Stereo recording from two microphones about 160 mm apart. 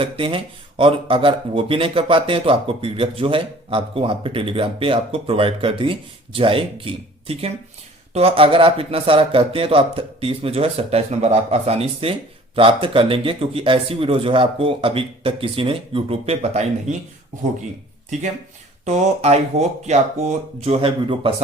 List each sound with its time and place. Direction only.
0.0 s speech: 35° right (ahead or behind)
18.9 s speech: 45° right (ahead or behind)